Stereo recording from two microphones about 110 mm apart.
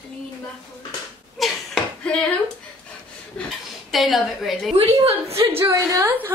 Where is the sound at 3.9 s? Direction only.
Centre (ahead or behind).